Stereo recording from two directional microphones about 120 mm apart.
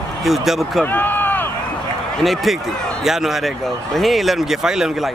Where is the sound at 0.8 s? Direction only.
15° left (ahead or behind).